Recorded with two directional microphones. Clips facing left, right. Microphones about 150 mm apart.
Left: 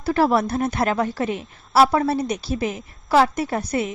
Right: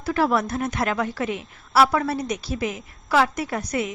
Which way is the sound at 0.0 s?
30° left (ahead or behind).